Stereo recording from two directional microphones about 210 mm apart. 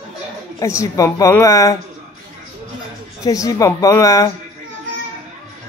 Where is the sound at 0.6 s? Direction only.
15° left (ahead or behind).